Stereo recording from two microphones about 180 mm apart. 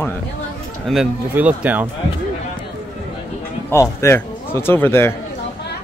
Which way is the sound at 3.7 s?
15° left (ahead or behind).